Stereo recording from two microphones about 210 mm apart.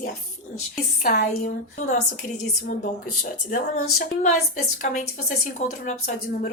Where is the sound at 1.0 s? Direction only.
45° left (ahead or behind).